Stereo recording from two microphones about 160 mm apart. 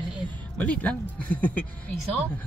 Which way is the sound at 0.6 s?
10° left (ahead or behind).